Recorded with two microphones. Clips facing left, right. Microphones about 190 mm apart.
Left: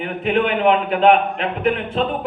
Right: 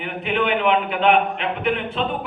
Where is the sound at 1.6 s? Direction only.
45° left (ahead or behind).